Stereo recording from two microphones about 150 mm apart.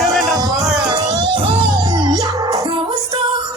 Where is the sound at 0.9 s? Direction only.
30° right (ahead or behind).